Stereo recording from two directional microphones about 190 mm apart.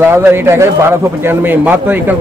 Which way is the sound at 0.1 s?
10° right (ahead or behind).